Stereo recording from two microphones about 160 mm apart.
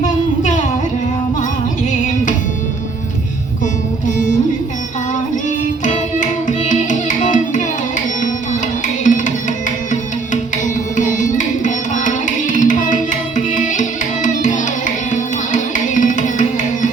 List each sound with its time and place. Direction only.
0.0 s music: 50° left (ahead or behind)
5.8 s music: 50° left (ahead or behind)
9.0 s music: 55° left (ahead or behind)